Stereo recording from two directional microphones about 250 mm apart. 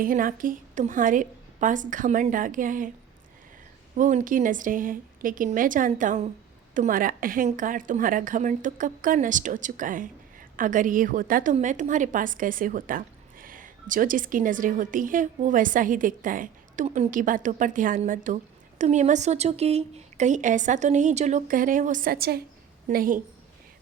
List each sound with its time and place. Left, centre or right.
0.0 s a woman's voice: right
3.9 s a woman's voice: right